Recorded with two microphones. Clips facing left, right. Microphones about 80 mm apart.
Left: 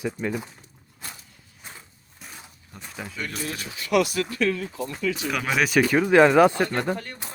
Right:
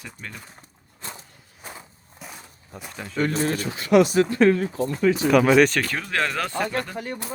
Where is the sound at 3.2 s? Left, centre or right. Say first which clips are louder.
Right 10 dB; right.